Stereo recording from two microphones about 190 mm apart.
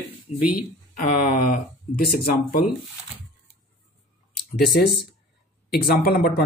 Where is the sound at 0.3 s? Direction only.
35° left (ahead or behind).